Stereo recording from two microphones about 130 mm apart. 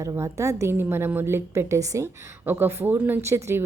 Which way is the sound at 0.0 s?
25° right (ahead or behind).